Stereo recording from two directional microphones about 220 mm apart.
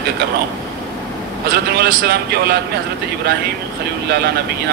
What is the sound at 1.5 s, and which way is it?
A man's voice, 45° right (ahead or behind).